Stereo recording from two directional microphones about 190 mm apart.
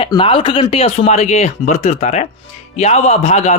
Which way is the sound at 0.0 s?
30° left (ahead or behind).